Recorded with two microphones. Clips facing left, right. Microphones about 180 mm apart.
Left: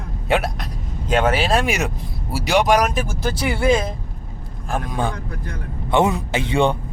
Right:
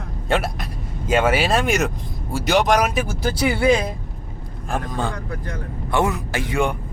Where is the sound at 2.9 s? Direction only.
10° right (ahead or behind).